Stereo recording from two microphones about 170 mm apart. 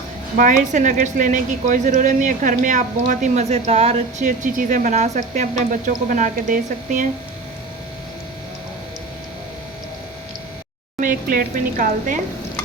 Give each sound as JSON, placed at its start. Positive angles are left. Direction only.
{"t": 0.3, "sound": "a woman's voice", "side_deg": -50}
{"t": 11.0, "sound": "a woman's voice", "side_deg": -55}